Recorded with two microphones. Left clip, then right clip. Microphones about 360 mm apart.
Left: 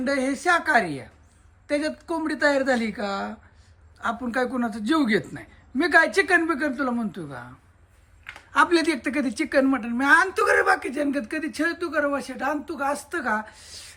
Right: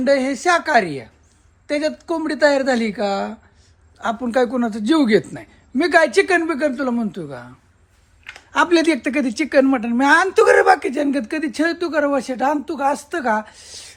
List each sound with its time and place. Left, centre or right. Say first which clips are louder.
0.0 s a man's voice: right 7 dB; centre